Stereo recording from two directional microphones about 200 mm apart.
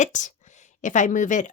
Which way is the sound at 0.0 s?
40° left (ahead or behind).